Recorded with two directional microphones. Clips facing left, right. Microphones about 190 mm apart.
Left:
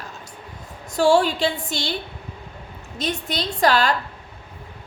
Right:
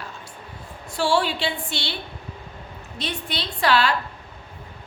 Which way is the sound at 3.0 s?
45° left (ahead or behind).